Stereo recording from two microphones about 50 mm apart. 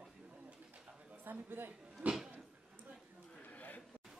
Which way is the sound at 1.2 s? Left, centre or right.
Right.